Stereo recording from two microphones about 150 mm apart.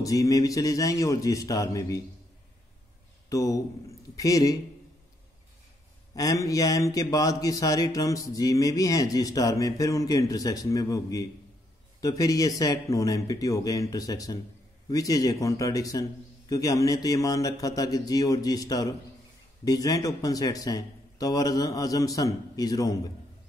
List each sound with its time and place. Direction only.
0.0 s speech: 20° left (ahead or behind)
3.3 s speech: 20° left (ahead or behind)
6.1 s speech: 25° left (ahead or behind)